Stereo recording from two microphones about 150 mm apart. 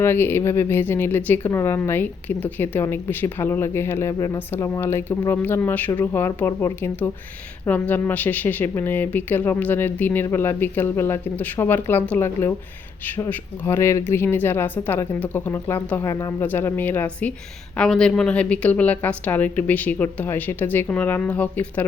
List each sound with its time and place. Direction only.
0.0 s a woman's voice: 15° left (ahead or behind)